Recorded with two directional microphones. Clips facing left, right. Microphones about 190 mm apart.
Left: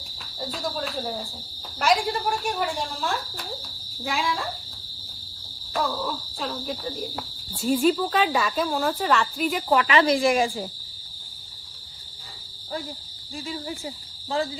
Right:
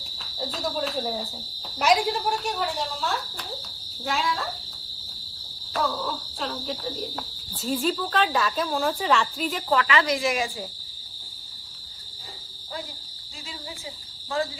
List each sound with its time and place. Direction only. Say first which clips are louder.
0.0 s cricket: right 1 dB; centre (ahead or behind)
1.8 s speech: right 1 dB; centre (ahead or behind)
4.0 s speech: even; centre (ahead or behind)
5.7 s speech: even; centre (ahead or behind); by 10.2 s 25° left (ahead or behind)
10.2 s cricket: left 5 dB; 50° left (ahead or behind)
13.5 s cricket: left 6 dB; 50° left (ahead or behind)